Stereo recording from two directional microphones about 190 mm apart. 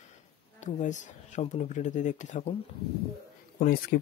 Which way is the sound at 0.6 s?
40° left (ahead or behind).